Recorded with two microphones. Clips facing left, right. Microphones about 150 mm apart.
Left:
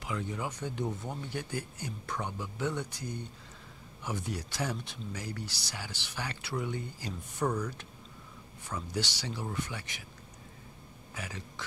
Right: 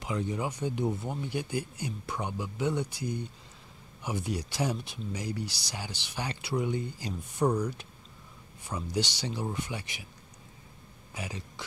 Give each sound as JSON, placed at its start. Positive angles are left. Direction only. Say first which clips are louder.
{"t": 0.0, "sound": "speech", "louder": "right 4 dB", "side_deg": -20}
{"t": 11.1, "sound": "speech", "louder": "right 3 dB", "side_deg": -15}